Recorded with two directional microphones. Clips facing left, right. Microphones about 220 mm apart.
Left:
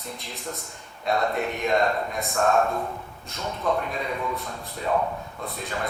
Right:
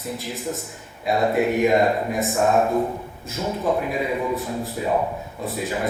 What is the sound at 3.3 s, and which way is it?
Speech, 5° right (ahead or behind).